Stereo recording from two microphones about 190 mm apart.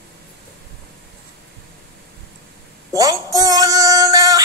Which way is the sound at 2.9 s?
20° right (ahead or behind).